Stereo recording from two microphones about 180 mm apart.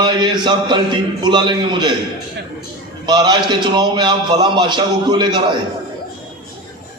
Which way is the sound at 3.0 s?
25° right (ahead or behind).